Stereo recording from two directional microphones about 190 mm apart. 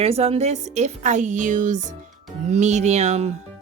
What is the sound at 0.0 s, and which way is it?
A woman's voice, 30° right (ahead or behind).